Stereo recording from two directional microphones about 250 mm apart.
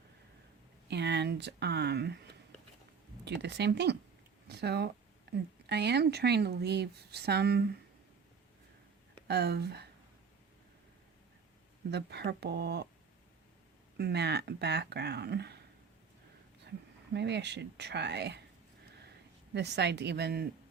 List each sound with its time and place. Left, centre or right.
0.9 s speech: right
9.2 s speech: right
11.9 s speech: right
14.0 s speech: right
17.2 s speech: right
19.5 s speech: right